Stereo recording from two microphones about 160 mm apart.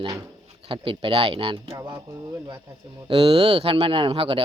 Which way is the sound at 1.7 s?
20° right (ahead or behind).